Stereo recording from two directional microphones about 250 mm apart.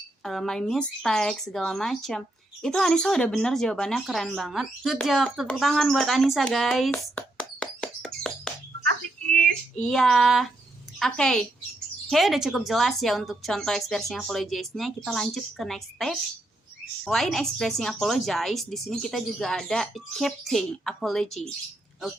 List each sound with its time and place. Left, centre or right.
0.2 s speech: centre
9.7 s speech: centre